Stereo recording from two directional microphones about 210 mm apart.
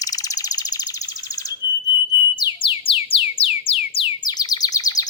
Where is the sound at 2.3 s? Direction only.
20° left (ahead or behind).